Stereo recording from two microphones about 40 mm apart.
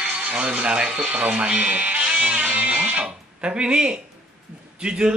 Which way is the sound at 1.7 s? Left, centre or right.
Right.